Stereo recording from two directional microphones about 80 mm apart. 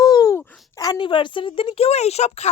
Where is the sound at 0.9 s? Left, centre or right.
Left.